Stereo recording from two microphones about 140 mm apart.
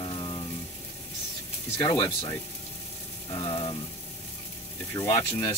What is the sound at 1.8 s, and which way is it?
Speech, 35° left (ahead or behind).